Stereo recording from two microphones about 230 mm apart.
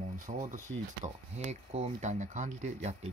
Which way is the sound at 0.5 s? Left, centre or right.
Right.